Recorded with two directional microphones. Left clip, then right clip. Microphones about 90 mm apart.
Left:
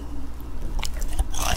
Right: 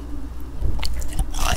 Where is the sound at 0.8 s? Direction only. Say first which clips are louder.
Right 1 dB; 15° right (ahead or behind).